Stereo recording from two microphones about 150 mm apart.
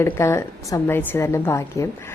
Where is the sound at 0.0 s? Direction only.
20° left (ahead or behind).